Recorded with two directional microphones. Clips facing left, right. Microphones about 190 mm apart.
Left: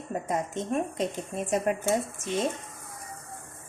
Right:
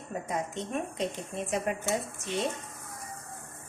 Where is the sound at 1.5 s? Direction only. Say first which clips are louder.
Left 5 dB; 45° left (ahead or behind).